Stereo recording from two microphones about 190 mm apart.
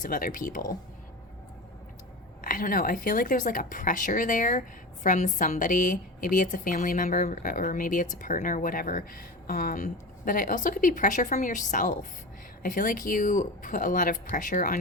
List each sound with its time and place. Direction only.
0.0 s speech: 45° left (ahead or behind)
2.4 s speech: 45° left (ahead or behind)